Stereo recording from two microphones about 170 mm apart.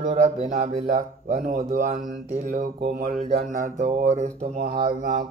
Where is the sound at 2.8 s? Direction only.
35° right (ahead or behind).